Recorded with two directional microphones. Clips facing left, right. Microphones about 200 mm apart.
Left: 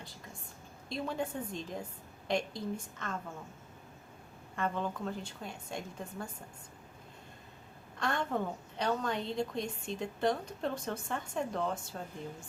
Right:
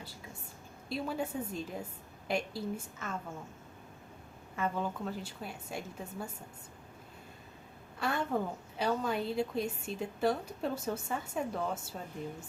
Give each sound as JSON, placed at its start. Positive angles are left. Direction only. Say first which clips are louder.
{"t": 0.9, "sound": "a woman's voice", "louder": "right 1 dB", "side_deg": -5}
{"t": 4.5, "sound": "a woman's voice", "louder": "even", "side_deg": -5}
{"t": 7.9, "sound": "a woman's voice", "louder": "right 1 dB", "side_deg": -5}